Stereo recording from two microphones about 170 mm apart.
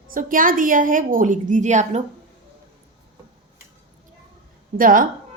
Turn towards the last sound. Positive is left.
turn(degrees=-55)  # may be behind; listen again after turning